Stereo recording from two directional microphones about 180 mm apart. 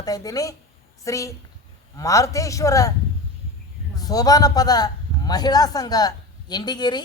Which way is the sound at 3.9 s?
20° left (ahead or behind).